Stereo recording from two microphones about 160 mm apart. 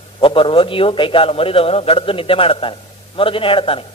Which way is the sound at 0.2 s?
35° left (ahead or behind).